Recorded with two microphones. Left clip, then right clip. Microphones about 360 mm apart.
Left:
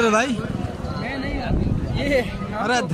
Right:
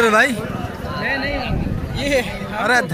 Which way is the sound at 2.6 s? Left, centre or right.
Centre.